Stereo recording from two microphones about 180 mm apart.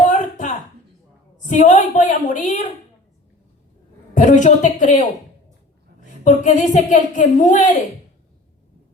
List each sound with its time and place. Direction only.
0.1 s a sound: 45° left (ahead or behind)
1.5 s a woman's voice: 45° left (ahead or behind)
4.1 s a woman's voice: 45° left (ahead or behind)